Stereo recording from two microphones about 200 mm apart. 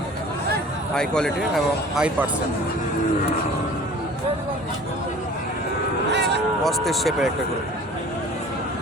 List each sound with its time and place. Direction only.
0.9 s speech: 5° left (ahead or behind)
6.6 s speech: centre (ahead or behind)